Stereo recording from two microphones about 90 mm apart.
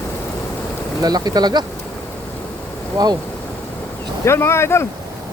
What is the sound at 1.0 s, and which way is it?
Speech, 45° right (ahead or behind).